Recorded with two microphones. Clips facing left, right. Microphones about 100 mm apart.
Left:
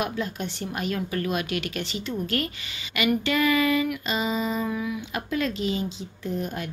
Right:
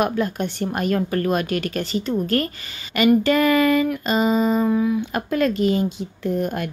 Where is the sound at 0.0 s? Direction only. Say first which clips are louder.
Right 7 dB; 50° right (ahead or behind); by 5.0 s 35° right (ahead or behind).